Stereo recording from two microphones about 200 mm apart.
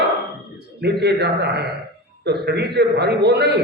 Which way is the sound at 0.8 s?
55° right (ahead or behind).